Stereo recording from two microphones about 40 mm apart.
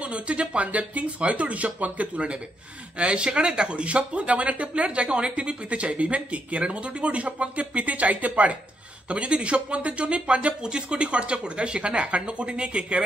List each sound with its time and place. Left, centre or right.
0.0 s speech: right